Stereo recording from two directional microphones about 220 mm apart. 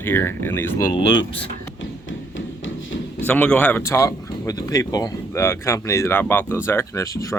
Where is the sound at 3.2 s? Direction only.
5° left (ahead or behind).